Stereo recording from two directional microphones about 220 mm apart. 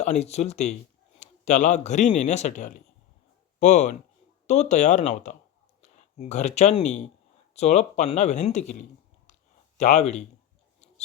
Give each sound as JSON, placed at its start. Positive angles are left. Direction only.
{"t": 0.0, "sound": "a man's voice", "side_deg": 30}